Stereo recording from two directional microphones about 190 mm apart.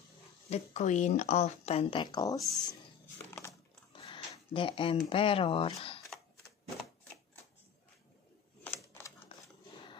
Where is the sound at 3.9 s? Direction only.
25° left (ahead or behind).